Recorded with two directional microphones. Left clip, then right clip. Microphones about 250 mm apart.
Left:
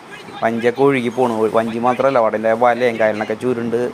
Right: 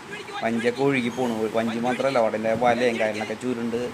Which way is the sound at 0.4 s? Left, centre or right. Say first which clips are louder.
Left 8 dB; centre.